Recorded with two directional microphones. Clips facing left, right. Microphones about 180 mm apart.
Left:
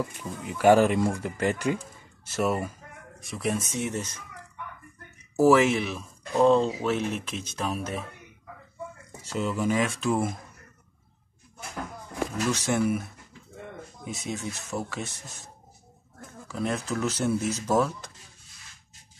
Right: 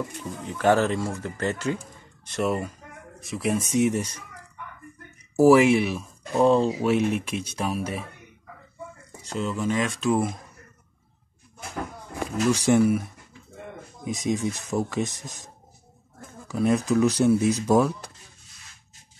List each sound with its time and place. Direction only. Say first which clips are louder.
0.5 s speech: left 2 dB; 10° left (ahead or behind)
2.2 s speech: right 1 dB; 5° left (ahead or behind)
3.6 s speech: right 8 dB; 15° right (ahead or behind)
5.4 s speech: right 4 dB; 10° right (ahead or behind)
9.4 s speech: even; 10° left (ahead or behind)
12.4 s speech: right 7 dB; 15° right (ahead or behind)
16.5 s speech: right 8 dB; 15° right (ahead or behind)